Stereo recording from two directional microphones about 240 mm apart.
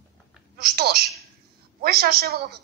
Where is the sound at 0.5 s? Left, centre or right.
Right.